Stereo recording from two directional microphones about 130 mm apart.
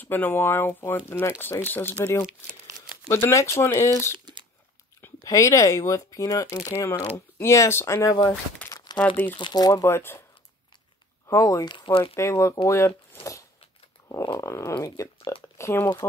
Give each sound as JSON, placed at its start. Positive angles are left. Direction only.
{"t": 0.0, "sound": "speech", "side_deg": 15}
{"t": 2.2, "sound": "crumpling", "side_deg": -5}
{"t": 3.1, "sound": "speech", "side_deg": 20}
{"t": 5.2, "sound": "speech", "side_deg": 25}
{"t": 8.6, "sound": "crumpling", "side_deg": 30}
{"t": 8.9, "sound": "speech", "side_deg": 10}
{"t": 9.3, "sound": "speech", "side_deg": 35}
{"t": 11.2, "sound": "speech", "side_deg": 25}
{"t": 12.0, "sound": "speech", "side_deg": 20}